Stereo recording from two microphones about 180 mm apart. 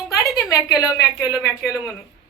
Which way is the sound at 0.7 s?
20° left (ahead or behind).